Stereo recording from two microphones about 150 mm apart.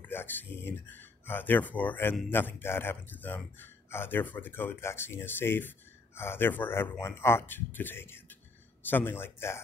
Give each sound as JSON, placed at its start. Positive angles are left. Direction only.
{"t": 0.0, "sound": "speech", "side_deg": 15}